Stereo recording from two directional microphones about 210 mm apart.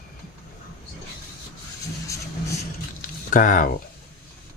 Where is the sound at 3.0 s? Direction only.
40° left (ahead or behind).